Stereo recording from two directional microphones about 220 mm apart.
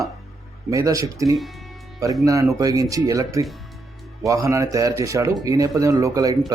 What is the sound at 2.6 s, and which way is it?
Speech, 15° right (ahead or behind).